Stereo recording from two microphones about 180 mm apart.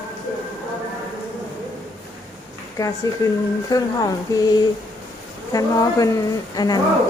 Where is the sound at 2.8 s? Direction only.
15° left (ahead or behind).